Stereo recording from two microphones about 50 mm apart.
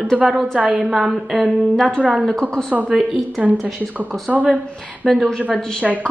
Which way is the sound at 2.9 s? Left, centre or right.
Centre.